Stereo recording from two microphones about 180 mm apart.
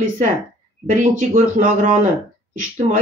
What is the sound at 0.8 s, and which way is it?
Speech, 45° right (ahead or behind).